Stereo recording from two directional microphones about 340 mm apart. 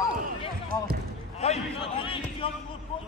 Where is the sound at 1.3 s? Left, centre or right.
Centre.